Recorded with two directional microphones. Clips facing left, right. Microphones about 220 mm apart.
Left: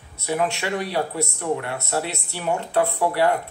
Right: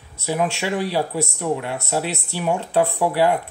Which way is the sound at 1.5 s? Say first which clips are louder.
Right 1 dB; 15° right (ahead or behind).